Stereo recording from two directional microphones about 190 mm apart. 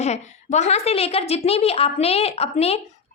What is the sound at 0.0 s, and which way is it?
Speech, 35° left (ahead or behind).